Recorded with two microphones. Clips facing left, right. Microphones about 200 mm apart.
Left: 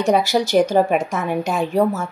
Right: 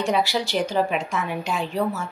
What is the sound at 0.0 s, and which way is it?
A woman's voice, 45° left (ahead or behind).